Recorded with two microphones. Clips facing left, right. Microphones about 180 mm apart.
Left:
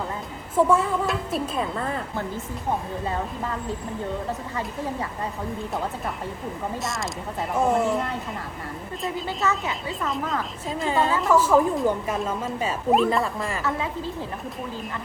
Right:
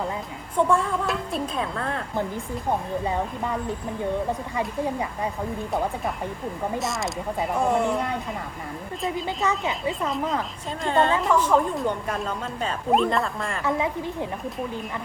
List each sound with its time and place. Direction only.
0.5 s speech: 5° left (ahead or behind)
6.7 s speech: centre (ahead or behind)
9.2 s a woman's voice: 20° right (ahead or behind)
10.7 s speech: 5° left (ahead or behind)
13.7 s a woman's voice: 15° right (ahead or behind)